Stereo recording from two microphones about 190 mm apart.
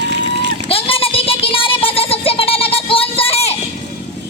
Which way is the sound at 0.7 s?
30° left (ahead or behind).